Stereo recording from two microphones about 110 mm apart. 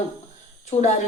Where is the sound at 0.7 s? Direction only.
90° left.